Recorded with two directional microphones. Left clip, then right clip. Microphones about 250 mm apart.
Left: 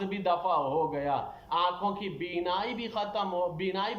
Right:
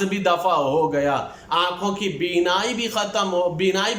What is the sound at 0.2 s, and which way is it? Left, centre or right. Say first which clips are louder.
A man's voice: right 8 dB; right.